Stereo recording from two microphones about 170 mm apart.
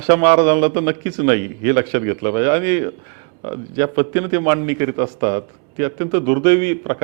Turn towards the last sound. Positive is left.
turn(degrees=-15)  # may be behind; listen again after turning